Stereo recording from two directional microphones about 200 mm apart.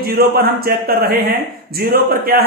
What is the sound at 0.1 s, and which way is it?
A man's voice, 50° right (ahead or behind).